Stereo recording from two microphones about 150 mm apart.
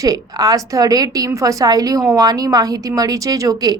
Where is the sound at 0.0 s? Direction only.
25° right (ahead or behind).